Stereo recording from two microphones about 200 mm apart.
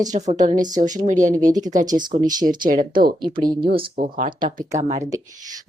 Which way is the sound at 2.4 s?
45° right (ahead or behind).